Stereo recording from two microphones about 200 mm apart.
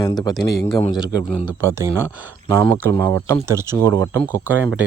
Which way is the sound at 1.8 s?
15° right (ahead or behind).